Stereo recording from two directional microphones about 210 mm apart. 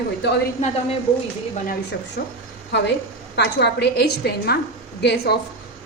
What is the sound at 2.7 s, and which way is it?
A woman's voice, 55° left (ahead or behind).